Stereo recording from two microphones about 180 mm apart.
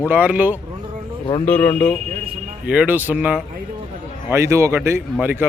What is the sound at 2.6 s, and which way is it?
Speech, 10° right (ahead or behind).